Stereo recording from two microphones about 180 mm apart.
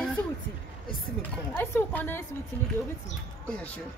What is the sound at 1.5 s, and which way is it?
Speech, 10° left (ahead or behind).